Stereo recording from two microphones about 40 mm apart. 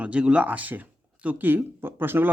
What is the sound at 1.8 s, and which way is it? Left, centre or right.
Speech, right.